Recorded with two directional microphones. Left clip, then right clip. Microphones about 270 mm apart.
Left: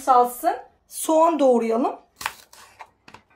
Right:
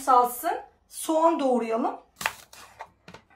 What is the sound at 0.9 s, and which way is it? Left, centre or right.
A woman's voice, left.